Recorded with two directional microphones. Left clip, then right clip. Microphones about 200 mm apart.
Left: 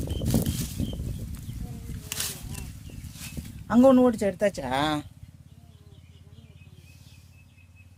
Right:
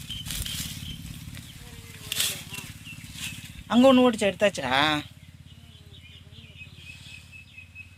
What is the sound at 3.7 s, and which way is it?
Speech, 35° left (ahead or behind).